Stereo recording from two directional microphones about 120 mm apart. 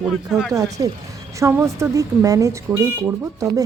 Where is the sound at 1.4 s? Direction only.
20° right (ahead or behind).